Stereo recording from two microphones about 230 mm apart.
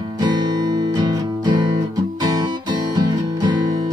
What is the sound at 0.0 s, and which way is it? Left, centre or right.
Music, centre.